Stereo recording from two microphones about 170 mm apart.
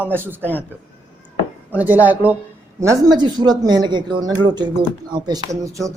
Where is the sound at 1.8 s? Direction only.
10° right (ahead or behind).